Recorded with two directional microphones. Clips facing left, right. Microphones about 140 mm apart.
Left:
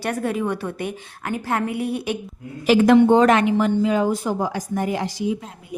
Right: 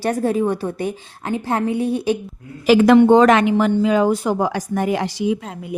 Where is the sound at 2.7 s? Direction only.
90° right.